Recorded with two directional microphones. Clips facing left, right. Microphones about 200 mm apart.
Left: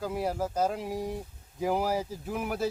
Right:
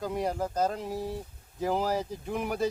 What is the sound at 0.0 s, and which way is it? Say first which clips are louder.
Speech: even; 5° left (ahead or behind).